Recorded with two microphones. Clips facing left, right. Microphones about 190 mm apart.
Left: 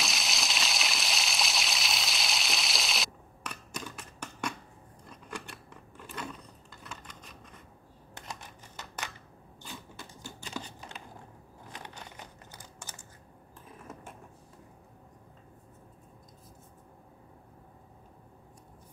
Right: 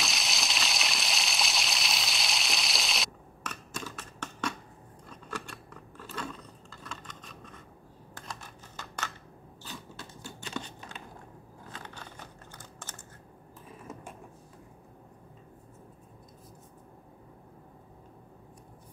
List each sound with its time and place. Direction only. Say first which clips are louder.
0.0 s a sound: even; centre (ahead or behind)
3.9 s typing: right 2 dB; 10° left (ahead or behind)
5.7 s scissors: right 2 dB; 15° left (ahead or behind)
8.3 s typing: even; 20° left (ahead or behind)
9.6 s biting: right 1 dB; 15° left (ahead or behind)
11.7 s computer keyboard: even; 15° left (ahead or behind)